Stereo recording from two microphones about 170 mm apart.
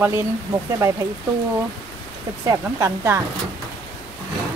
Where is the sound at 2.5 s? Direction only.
15° right (ahead or behind).